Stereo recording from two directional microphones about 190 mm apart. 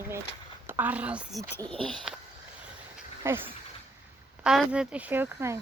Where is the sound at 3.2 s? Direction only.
10° right (ahead or behind).